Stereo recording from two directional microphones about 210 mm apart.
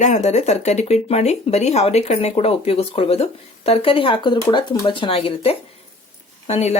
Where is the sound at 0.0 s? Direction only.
35° left (ahead or behind).